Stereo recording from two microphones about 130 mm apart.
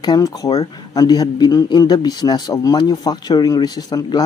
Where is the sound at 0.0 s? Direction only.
30° left (ahead or behind).